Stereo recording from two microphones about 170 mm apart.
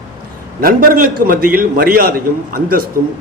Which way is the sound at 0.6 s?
55° right (ahead or behind).